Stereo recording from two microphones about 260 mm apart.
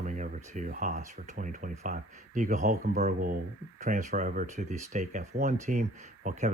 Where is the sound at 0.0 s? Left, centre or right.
Right.